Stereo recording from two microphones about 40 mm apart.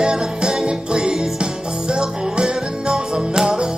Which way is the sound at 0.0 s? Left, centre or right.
Right.